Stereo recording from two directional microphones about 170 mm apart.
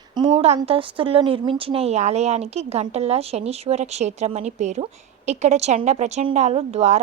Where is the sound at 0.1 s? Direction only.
30° right (ahead or behind).